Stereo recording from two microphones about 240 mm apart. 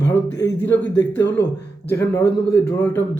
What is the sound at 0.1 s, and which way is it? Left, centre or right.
A man's voice, centre.